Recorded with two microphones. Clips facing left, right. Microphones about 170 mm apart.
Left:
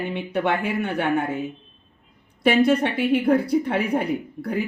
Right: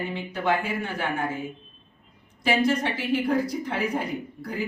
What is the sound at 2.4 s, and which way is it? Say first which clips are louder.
A woman's voice: left 5 dB; 60° left (ahead or behind).